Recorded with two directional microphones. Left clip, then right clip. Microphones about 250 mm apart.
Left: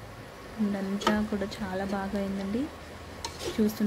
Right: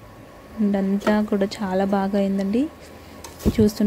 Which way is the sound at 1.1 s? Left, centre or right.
Right.